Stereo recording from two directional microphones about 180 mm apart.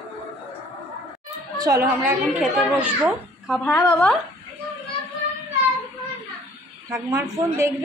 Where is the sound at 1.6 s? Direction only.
15° right (ahead or behind).